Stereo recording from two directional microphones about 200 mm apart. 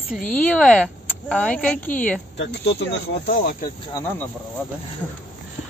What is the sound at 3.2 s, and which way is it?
Speech, 50° left (ahead or behind).